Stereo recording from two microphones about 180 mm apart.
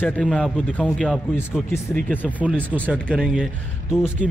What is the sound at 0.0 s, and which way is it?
A man's voice, 5° left (ahead or behind).